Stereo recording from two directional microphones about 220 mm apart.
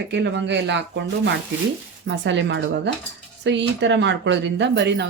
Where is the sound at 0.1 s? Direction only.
55° right (ahead or behind).